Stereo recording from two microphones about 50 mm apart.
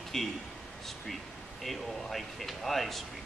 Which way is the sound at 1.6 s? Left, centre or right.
Centre.